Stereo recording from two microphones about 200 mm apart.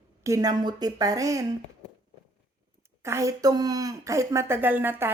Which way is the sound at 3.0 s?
15° right (ahead or behind).